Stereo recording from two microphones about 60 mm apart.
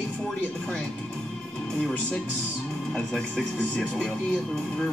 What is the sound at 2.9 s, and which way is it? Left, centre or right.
Speech, centre.